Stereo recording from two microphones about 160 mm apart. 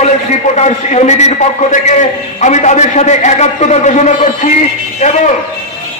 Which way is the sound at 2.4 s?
50° left (ahead or behind).